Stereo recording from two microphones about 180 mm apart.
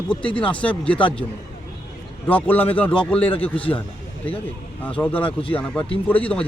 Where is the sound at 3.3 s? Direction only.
30° left (ahead or behind).